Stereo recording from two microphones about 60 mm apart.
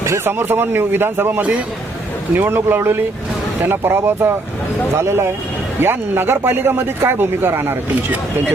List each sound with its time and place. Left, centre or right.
0.3 s speech: right